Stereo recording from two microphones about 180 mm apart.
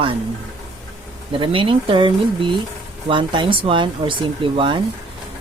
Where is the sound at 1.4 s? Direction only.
30° right (ahead or behind).